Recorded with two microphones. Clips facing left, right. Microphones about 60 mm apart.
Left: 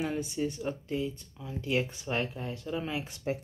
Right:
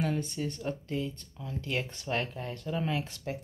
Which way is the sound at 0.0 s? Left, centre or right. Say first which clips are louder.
Even; centre.